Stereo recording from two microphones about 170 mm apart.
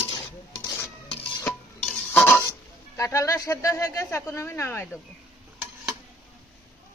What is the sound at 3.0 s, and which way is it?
Speech, 20° left (ahead or behind).